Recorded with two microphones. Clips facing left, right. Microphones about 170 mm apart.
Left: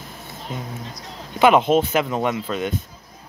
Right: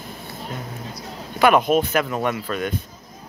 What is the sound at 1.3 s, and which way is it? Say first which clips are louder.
Speech: left 1 dB; 20° left (ahead or behind).